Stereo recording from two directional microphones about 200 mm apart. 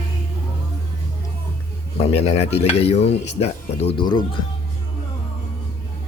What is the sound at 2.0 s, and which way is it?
Speech, 30° left (ahead or behind).